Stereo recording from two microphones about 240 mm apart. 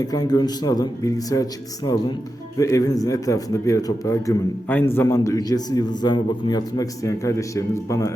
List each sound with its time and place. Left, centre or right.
0.0 s a man's voice: centre